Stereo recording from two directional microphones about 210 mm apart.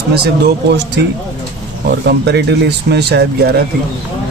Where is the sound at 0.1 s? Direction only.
50° right (ahead or behind).